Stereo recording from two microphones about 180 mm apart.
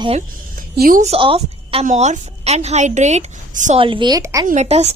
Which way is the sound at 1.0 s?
30° right (ahead or behind).